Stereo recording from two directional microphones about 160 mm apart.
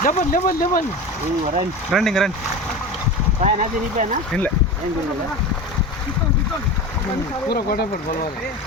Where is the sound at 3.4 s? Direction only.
55° right (ahead or behind).